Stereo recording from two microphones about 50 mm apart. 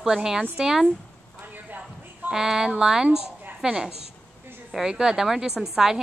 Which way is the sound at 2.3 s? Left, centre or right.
Centre.